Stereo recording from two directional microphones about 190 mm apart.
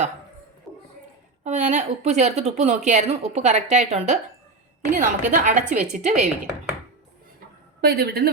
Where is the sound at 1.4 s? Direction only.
40° right (ahead or behind).